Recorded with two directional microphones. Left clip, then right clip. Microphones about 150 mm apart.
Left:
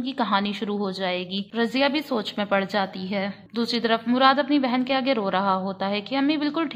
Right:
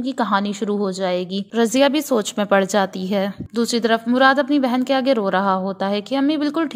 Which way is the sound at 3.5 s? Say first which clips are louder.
Right 5 dB; 35° right (ahead or behind).